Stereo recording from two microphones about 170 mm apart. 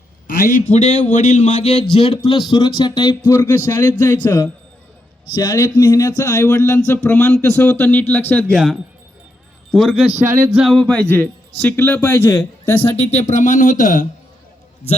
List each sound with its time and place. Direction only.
0.3 s speech: 60° left (ahead or behind); by 4.4 s 10° left (ahead or behind)
5.3 s speech: 25° left (ahead or behind); by 10.1 s centre (ahead or behind)
10.2 s music: 15° right (ahead or behind)
10.6 s speech: centre (ahead or behind)
13.0 s speech: 40° left (ahead or behind)